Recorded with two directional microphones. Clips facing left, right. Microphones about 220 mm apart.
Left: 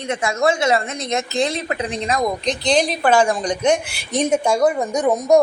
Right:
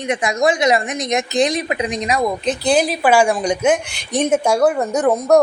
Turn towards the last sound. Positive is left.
turn(degrees=10)  # may be behind; listen again after turning